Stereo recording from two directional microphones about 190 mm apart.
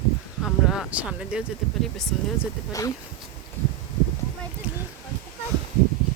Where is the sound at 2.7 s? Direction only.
15° left (ahead or behind).